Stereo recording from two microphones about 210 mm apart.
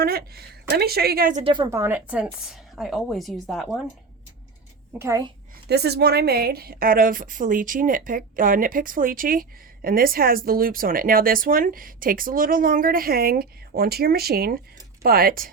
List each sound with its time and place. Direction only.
0.0 s a woman's voice: 45° right (ahead or behind); by 3.8 s centre (ahead or behind)
4.9 s a woman's voice: 15° right (ahead or behind)
5.6 s a woman's voice: 50° right (ahead or behind)